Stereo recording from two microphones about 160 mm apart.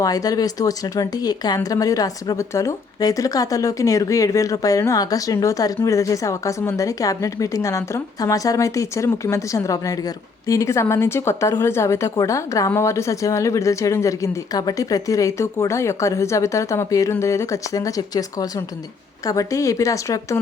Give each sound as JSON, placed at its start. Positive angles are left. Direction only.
{"t": 0.0, "sound": "a woman's voice", "side_deg": 20}
{"t": 19.3, "sound": "speech", "side_deg": 20}